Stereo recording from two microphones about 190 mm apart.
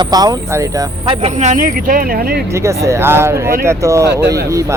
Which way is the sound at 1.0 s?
30° right (ahead or behind).